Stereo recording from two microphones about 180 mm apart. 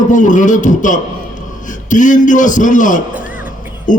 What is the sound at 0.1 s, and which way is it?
A man's voice, 45° left (ahead or behind).